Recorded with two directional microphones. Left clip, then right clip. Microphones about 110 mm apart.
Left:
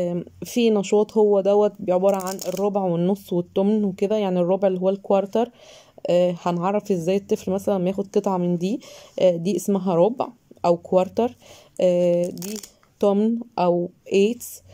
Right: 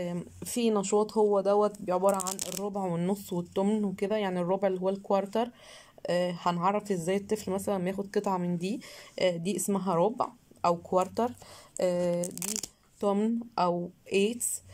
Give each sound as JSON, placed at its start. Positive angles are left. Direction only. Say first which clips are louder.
{"t": 0.0, "sound": "a woman's voice", "louder": "left 10 dB", "side_deg": 30}